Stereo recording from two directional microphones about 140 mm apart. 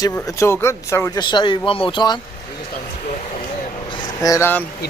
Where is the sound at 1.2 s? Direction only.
35° left (ahead or behind).